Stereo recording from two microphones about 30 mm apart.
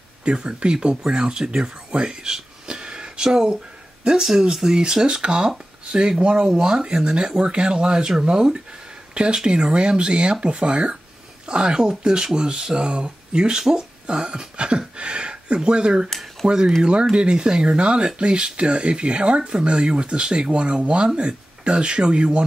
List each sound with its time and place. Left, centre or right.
0.2 s speech: right
4.2 s speech: centre; by 6.3 s right
6.3 s speech: right